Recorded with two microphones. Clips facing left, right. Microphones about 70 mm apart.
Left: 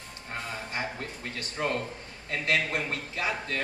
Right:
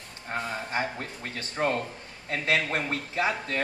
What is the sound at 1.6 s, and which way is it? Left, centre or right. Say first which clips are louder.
A man's voice: right 3 dB; right.